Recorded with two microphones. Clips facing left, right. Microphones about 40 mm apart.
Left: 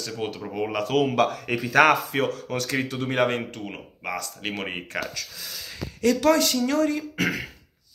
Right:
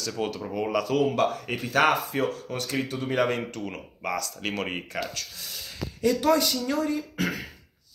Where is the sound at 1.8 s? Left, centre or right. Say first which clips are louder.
Left 4 dB; left.